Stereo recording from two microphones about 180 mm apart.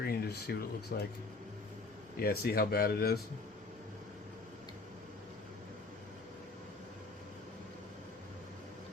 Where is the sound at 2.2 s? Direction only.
60° left (ahead or behind).